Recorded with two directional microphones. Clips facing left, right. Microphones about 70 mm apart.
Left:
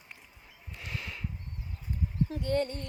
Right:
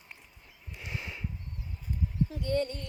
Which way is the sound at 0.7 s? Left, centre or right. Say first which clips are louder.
Even; centre.